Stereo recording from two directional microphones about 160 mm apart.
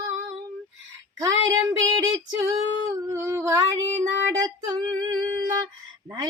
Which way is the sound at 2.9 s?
20° right (ahead or behind).